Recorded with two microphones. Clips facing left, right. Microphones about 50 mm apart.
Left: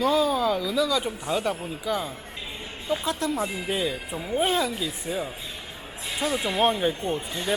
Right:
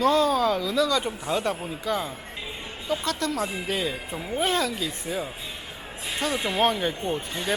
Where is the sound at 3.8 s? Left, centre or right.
Centre.